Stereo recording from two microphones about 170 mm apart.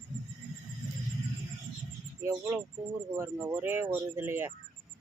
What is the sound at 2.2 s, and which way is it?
Speech, 15° right (ahead or behind).